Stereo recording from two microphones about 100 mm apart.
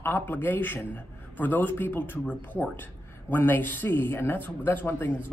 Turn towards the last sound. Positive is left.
turn(degrees=20)  # may be behind; listen again after turning